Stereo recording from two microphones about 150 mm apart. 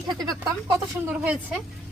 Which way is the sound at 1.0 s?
10° right (ahead or behind).